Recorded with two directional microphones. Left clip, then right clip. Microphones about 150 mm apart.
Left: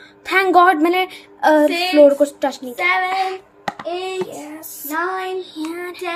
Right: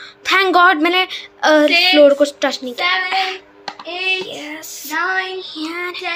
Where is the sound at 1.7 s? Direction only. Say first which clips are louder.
Right 7 dB; 55° left (ahead or behind).